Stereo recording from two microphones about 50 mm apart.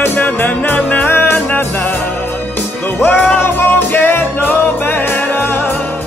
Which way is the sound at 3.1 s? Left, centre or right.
Left.